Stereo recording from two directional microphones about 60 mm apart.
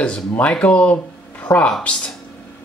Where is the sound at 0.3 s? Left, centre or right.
Left.